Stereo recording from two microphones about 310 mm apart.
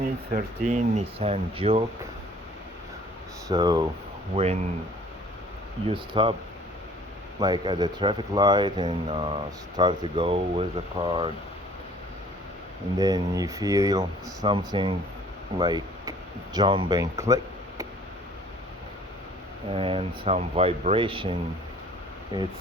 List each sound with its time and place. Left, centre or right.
0.0 s speech: right
3.5 s speech: centre
5.9 s speech: centre
7.3 s speech: centre
13.0 s speech: centre
19.7 s speech: centre